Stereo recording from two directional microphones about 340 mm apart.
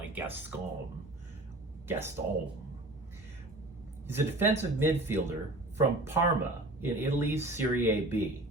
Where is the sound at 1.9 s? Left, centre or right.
Centre.